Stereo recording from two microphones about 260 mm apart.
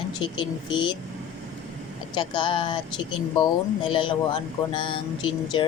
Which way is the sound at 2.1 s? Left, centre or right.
Centre.